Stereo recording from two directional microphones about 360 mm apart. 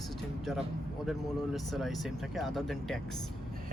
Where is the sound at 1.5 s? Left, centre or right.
Centre.